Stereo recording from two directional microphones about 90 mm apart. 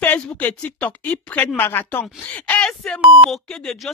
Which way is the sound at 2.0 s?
10° left (ahead or behind).